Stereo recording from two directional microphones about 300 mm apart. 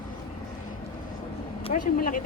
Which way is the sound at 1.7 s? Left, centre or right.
Left.